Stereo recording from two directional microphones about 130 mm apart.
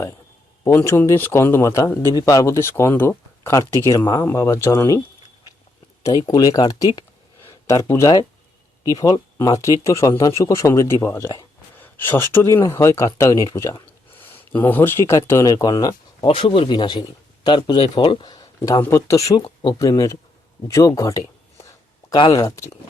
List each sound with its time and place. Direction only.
0.6 s speech: 20° left (ahead or behind)
4.3 s speech: 20° left (ahead or behind)
6.2 s speech: 30° left (ahead or behind)
16.2 s speech: 45° left (ahead or behind); by 19.2 s 20° left (ahead or behind)
19.3 s speech: 35° left (ahead or behind)